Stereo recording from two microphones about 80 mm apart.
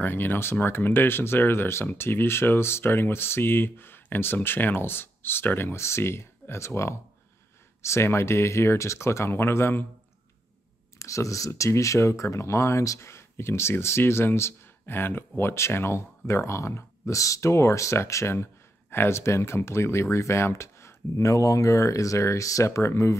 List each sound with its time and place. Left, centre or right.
0.0 s speech: left
11.0 s speech: left